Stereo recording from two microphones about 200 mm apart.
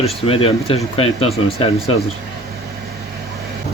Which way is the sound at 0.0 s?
30° left (ahead or behind).